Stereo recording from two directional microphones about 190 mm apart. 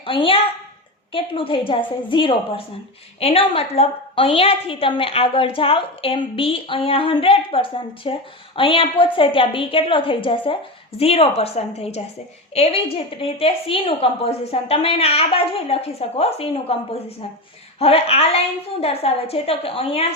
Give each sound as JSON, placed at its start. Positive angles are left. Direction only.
{"t": 0.0, "sound": "a woman's voice", "side_deg": 25}